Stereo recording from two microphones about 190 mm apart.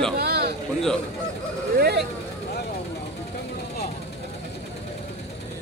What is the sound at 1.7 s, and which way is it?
Speech, 55° right (ahead or behind).